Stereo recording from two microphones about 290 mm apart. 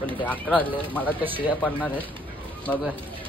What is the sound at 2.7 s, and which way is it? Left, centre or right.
Speech, centre.